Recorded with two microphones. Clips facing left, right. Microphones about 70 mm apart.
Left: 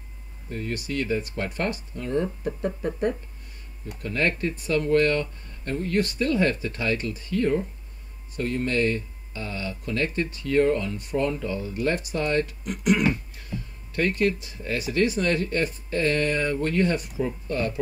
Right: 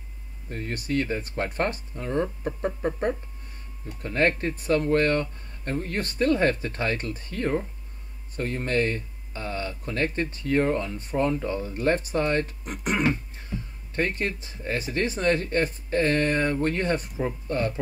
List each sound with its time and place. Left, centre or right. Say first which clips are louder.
0.5 s speech: right 1 dB; right